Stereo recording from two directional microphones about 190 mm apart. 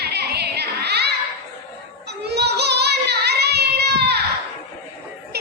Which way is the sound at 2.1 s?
60° right (ahead or behind).